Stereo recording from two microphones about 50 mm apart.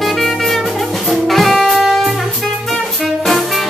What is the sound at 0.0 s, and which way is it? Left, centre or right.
Jazz, centre.